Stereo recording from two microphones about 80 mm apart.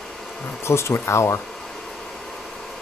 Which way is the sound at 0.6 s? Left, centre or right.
Left.